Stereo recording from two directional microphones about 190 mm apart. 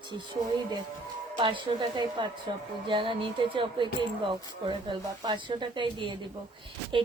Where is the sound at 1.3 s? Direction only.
25° right (ahead or behind).